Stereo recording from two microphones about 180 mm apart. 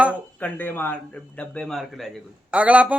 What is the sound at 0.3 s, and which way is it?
A man's voice, 10° left (ahead or behind).